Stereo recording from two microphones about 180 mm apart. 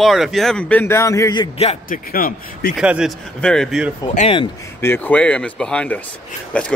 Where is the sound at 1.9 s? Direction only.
50° left (ahead or behind).